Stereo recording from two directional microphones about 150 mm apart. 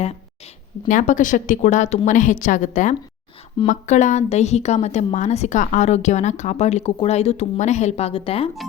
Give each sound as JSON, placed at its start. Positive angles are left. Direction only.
{"t": 0.9, "sound": "a woman's voice", "side_deg": 60}